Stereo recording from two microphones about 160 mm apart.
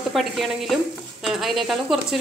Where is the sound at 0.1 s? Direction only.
Centre (ahead or behind).